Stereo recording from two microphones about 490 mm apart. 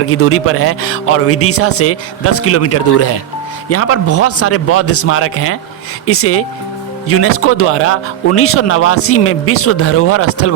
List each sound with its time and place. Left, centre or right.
0.1 s speech: left